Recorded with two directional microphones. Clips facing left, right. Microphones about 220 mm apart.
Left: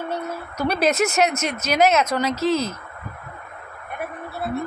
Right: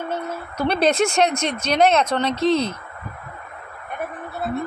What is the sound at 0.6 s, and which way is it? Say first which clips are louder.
Child singing: right 2 dB; 10° left (ahead or behind).